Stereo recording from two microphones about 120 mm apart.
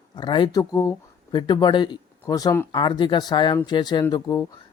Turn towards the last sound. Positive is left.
turn(degrees=30)  # may be behind; listen again after turning